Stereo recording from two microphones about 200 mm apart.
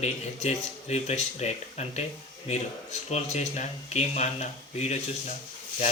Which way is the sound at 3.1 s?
35° left (ahead or behind).